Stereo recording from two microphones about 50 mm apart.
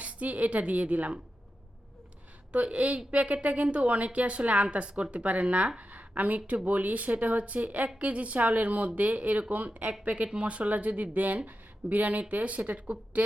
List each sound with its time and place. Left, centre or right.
0.0 s a woman's voice: right
2.5 s a woman's voice: right